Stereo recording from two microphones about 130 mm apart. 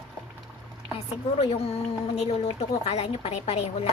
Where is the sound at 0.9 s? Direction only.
50° left (ahead or behind).